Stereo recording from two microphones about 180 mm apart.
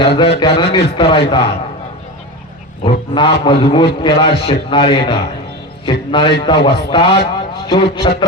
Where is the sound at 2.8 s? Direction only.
30° left (ahead or behind).